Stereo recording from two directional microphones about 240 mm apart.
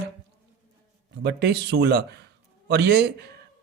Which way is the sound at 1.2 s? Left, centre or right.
Right.